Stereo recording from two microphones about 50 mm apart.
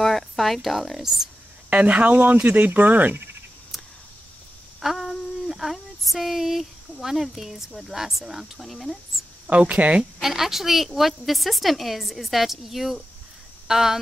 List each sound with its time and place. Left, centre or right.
0.0 s speech: centre
1.7 s speech: right
4.8 s speech: centre
9.5 s speech: right
10.2 s a woman's voice: centre